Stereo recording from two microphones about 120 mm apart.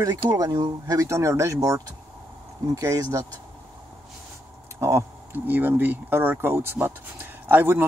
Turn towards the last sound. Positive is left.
turn(degrees=-15)  # may be behind; listen again after turning